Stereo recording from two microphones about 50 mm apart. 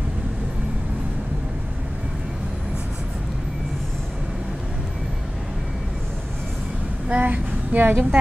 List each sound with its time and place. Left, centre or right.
7.1 s speech: right